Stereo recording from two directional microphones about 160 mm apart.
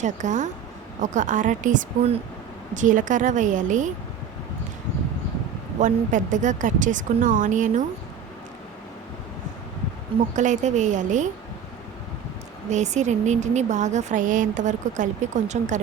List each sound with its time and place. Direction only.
0.0 s speech: 50° right (ahead or behind)
5.8 s speech: 55° right (ahead or behind)
10.3 s speech: 50° right (ahead or behind)
12.7 s speech: 45° right (ahead or behind)